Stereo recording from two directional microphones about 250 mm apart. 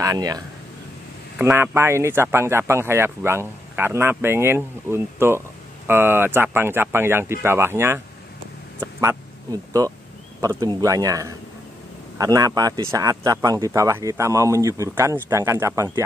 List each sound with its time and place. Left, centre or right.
0.0 s speech: centre
1.4 s speech: centre
8.7 s a sound: centre
10.4 s speech: centre